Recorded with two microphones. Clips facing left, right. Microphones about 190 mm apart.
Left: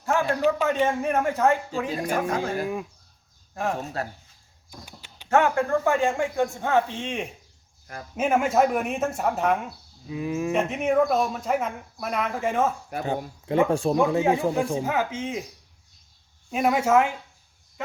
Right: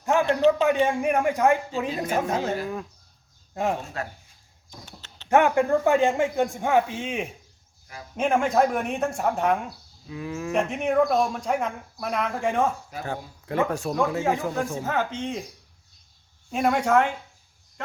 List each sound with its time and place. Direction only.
0.0 s a man's voice: 20° right (ahead or behind)
4.0 s speech: 35° left (ahead or behind)
4.7 s a sound: 10° left (ahead or behind)
5.3 s speech: 15° right (ahead or behind); by 9.6 s centre (ahead or behind)
10.1 s speech: 20° left (ahead or behind)
10.5 s speech: centre (ahead or behind)
13.1 s speech: 25° left (ahead or behind)
14.2 s speech: 15° left (ahead or behind)
16.5 s speech: 5° left (ahead or behind)